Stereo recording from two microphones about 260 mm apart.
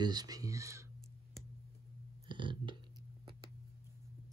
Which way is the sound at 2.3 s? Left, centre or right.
Centre.